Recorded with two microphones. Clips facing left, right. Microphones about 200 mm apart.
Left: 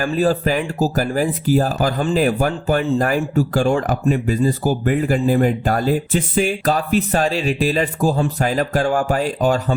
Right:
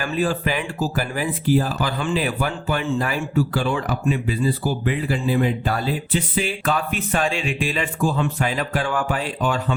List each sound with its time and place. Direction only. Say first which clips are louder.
0.0 s speech: left 5 dB; 40° left (ahead or behind)